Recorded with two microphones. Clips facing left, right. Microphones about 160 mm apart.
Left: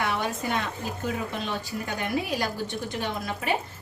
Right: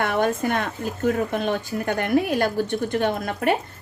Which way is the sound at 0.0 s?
55° right (ahead or behind).